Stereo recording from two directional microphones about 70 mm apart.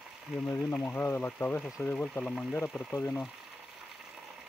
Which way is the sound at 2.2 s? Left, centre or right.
Centre.